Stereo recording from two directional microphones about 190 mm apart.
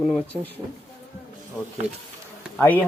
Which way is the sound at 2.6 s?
10° left (ahead or behind).